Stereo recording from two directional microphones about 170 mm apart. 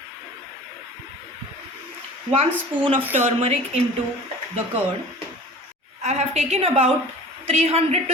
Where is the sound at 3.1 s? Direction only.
40° right (ahead or behind).